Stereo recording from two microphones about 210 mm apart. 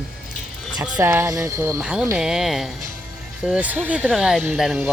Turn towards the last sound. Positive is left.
turn(degrees=0)  # may be behind; listen again after turning